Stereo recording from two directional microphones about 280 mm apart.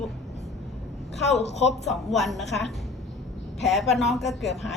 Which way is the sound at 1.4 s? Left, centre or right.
Left.